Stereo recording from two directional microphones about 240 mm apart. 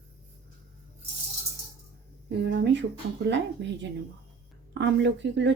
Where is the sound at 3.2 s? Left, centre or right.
Right.